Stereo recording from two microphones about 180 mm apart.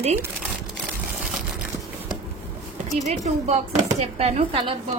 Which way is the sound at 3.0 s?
40° right (ahead or behind).